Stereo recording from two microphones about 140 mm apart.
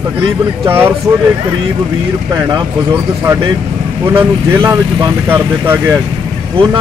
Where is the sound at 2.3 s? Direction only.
25° right (ahead or behind).